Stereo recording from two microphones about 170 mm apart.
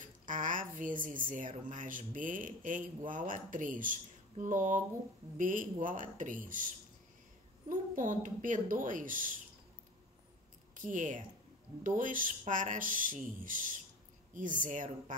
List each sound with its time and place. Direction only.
0.0 s speech: 50° right (ahead or behind)
7.7 s speech: 50° right (ahead or behind)
10.8 s speech: 50° right (ahead or behind)